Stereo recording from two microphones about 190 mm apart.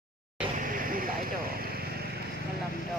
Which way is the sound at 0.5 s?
45° right (ahead or behind).